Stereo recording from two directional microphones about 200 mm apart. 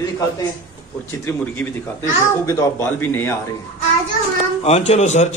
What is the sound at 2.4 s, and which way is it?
Speech, 10° left (ahead or behind).